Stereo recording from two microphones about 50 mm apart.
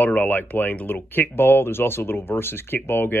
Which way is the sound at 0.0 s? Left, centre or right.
Left.